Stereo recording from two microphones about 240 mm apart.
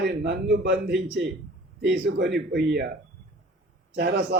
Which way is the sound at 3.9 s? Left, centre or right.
Right.